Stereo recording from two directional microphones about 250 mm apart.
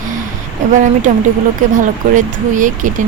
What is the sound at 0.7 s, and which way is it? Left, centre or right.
Speech, right.